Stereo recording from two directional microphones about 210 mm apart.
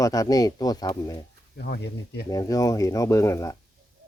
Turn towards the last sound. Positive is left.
turn(degrees=15)  # may be behind; listen again after turning